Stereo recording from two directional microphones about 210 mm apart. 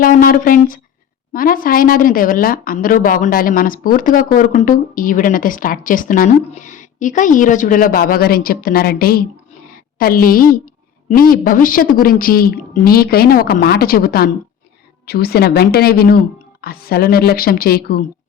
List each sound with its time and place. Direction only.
0.0 s a woman's voice: 45° left (ahead or behind)